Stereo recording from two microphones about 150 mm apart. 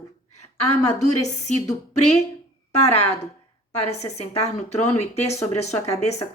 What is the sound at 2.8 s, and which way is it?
Speech, 45° left (ahead or behind).